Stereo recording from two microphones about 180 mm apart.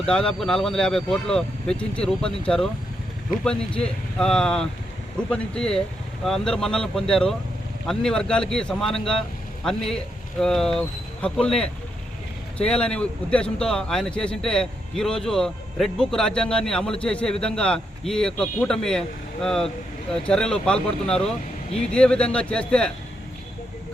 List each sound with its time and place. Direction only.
0.0 s a man's voice: 5° left (ahead or behind)